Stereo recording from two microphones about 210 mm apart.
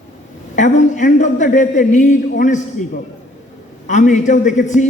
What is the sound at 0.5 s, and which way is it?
A man's voice, 35° left (ahead or behind).